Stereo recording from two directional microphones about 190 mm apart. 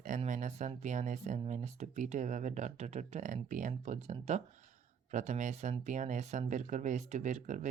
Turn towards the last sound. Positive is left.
turn(degrees=-40)  # may be behind; listen again after turning